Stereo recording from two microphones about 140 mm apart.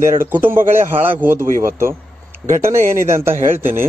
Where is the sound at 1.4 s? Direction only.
75° right (ahead or behind).